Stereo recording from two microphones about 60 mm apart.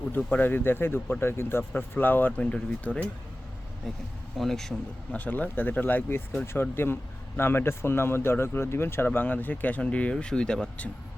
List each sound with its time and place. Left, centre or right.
0.2 s a man's voice: left; by 4.7 s centre
5.1 s speech: left
9.0 s speech: left; by 10.7 s centre